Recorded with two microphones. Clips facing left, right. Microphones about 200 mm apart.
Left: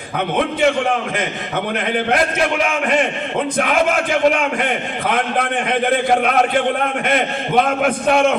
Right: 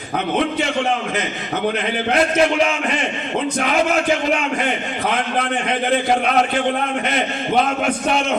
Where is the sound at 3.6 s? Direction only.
55° left (ahead or behind).